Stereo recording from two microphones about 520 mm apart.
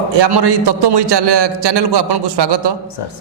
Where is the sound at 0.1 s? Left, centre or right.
Right.